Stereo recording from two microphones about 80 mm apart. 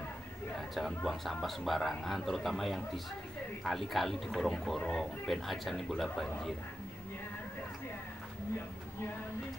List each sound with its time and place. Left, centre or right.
0.6 s speech: centre